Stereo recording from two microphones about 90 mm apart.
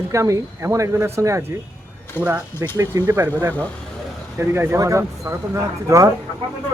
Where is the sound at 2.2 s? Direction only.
20° left (ahead or behind).